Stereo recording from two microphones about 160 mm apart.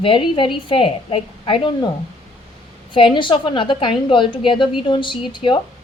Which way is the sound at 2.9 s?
30° left (ahead or behind).